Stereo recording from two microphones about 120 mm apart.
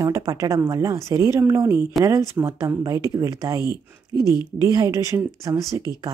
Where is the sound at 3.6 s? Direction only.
35° left (ahead or behind).